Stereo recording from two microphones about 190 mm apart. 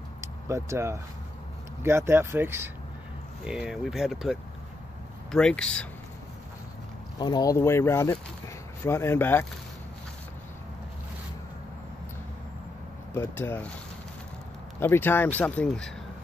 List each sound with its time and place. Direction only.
0.2 s speech: 15° right (ahead or behind); by 5.9 s 5° left (ahead or behind)
7.2 s speech: 20° left (ahead or behind)
13.1 s speech: 15° left (ahead or behind)
14.8 s speech: 10° left (ahead or behind)